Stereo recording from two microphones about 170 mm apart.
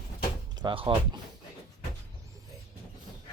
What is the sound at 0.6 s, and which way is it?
Speech, 30° right (ahead or behind).